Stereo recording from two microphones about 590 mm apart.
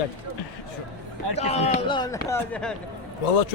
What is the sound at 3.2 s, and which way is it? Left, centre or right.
Speech, left.